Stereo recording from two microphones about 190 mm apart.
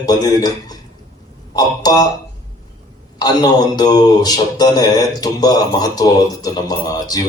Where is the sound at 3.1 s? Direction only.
20° left (ahead or behind).